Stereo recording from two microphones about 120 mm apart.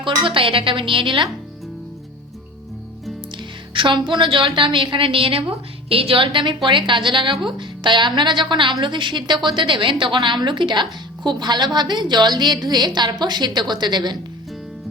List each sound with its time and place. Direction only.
0.0 s a woman's voice: 45° right (ahead or behind)
3.3 s a woman's voice: 40° right (ahead or behind)